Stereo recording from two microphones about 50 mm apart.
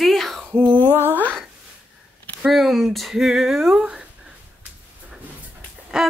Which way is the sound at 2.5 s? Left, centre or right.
Centre.